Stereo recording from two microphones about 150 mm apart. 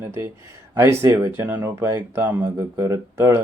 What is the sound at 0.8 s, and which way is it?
Speech, 15° right (ahead or behind).